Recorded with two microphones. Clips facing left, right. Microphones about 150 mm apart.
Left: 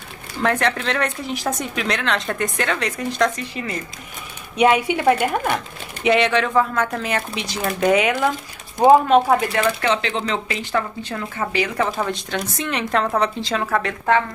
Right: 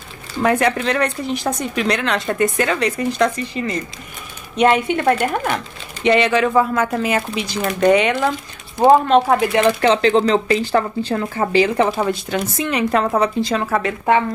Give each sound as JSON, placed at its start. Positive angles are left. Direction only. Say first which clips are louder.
{"t": 0.4, "sound": "speech", "louder": "right 4 dB", "side_deg": -10}
{"t": 9.7, "sound": "speech", "louder": "right 6 dB", "side_deg": -30}
{"t": 12.1, "sound": "speech", "louder": "right 4 dB", "side_deg": -5}